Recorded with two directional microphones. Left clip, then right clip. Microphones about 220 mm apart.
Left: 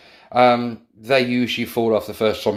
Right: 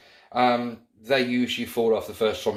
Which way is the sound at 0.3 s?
40° left (ahead or behind).